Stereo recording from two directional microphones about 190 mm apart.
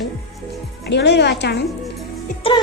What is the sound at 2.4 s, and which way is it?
Music, 30° left (ahead or behind).